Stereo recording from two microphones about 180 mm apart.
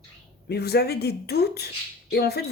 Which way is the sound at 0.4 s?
65° left (ahead or behind).